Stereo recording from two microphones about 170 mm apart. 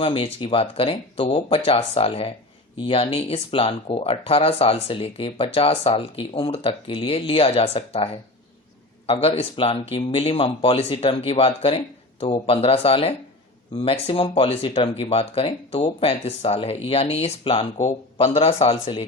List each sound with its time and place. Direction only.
0.0 s speech: 30° left (ahead or behind)